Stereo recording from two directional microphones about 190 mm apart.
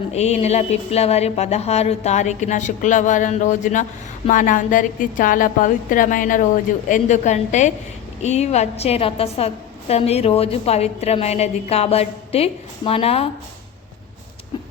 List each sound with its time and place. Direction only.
0.1 s a woman's voice: 35° left (ahead or behind)